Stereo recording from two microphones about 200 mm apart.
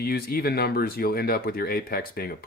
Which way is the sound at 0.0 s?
50° left (ahead or behind).